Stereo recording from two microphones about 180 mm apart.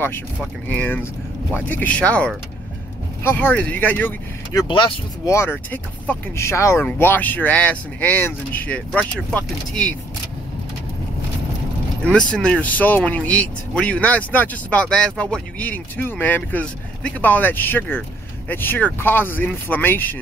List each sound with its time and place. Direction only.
0.4 s speech: 10° left (ahead or behind)
4.6 s speech: 25° left (ahead or behind); by 9.9 s 10° left (ahead or behind)
12.0 s speech: 5° left (ahead or behind)